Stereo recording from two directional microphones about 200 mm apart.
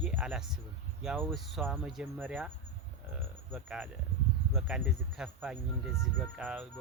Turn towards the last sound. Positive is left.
turn(degrees=-10)  # may be behind; listen again after turning